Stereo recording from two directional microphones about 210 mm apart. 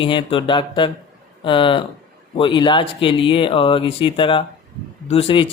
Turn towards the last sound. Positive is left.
turn(degrees=25)  # may be behind; listen again after turning